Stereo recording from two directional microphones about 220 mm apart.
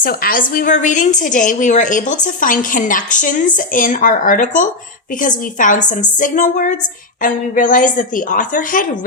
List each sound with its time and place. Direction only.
0.0 s a woman's voice: 40° left (ahead or behind)